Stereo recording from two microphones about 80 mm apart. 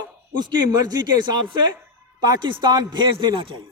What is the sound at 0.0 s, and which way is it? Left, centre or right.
A man's voice, right.